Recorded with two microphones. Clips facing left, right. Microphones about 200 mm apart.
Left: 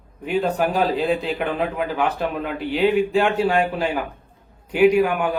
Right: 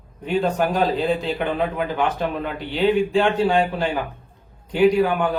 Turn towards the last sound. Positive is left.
turn(degrees=10)  # may be behind; listen again after turning